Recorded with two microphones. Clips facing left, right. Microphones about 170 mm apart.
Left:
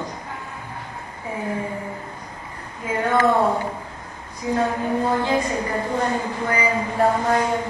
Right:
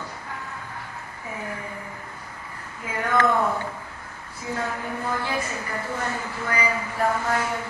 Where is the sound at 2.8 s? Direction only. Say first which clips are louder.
Left 4 dB; 25° left (ahead or behind).